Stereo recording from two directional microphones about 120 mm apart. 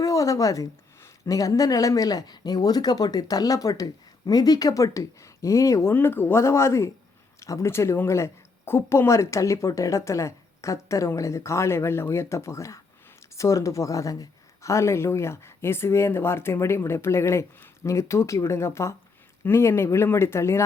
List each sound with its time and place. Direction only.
0.0 s speech: 25° left (ahead or behind)